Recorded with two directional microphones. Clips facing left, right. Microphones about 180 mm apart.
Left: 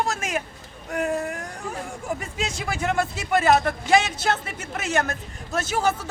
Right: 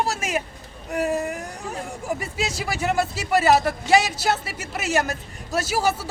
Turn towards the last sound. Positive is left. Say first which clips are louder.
# right 1 dB
turn(degrees=-10)  # may be behind; listen again after turning